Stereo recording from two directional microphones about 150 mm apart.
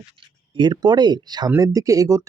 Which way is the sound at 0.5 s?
30° right (ahead or behind).